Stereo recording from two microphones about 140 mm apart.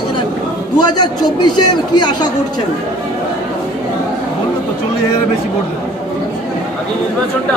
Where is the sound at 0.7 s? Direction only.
30° left (ahead or behind).